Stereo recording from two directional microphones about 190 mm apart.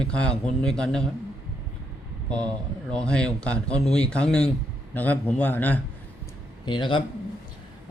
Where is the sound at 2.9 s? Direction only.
5° left (ahead or behind).